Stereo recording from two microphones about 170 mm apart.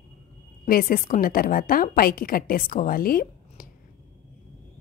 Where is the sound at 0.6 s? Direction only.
55° left (ahead or behind).